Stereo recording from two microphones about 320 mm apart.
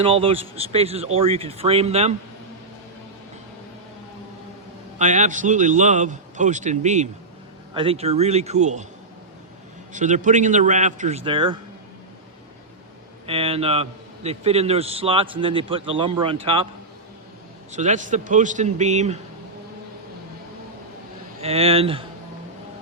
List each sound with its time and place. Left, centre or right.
0.0 s a man's voice: centre
4.9 s a man's voice: right
9.9 s a man's voice: right
13.2 s a man's voice: centre
17.7 s a man's voice: right
21.4 s a man's voice: centre